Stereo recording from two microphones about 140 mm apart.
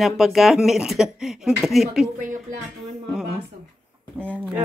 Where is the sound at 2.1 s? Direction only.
70° right (ahead or behind).